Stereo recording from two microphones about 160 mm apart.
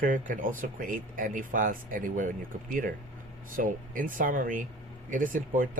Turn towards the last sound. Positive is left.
turn(degrees=-55)  # may be behind; listen again after turning